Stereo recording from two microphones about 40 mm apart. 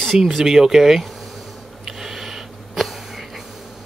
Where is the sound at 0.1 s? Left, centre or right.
Centre.